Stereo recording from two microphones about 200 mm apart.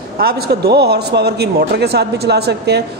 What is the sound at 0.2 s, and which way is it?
A man's voice, 50° right (ahead or behind).